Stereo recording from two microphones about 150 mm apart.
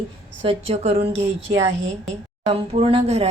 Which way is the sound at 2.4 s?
40° right (ahead or behind).